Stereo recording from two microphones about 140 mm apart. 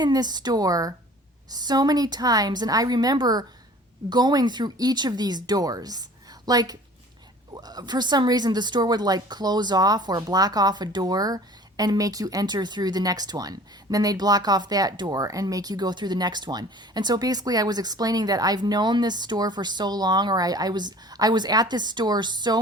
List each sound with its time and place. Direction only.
0.0 s speech: 30° right (ahead or behind)